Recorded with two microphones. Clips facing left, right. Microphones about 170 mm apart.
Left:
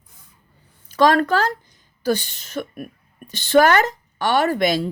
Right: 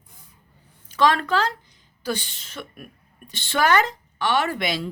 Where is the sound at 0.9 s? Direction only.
45° left (ahead or behind).